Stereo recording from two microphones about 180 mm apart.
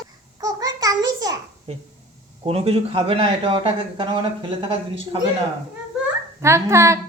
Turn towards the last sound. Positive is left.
turn(degrees=-15)  # may be behind; listen again after turning